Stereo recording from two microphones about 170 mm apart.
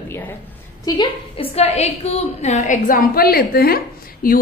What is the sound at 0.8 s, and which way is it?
A woman's voice, 30° left (ahead or behind).